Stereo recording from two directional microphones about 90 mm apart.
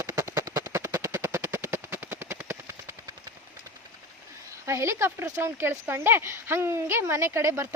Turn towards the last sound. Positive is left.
turn(degrees=-30)  # may be behind; listen again after turning